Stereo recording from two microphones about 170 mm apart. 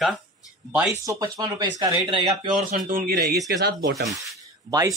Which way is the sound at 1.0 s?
25° right (ahead or behind).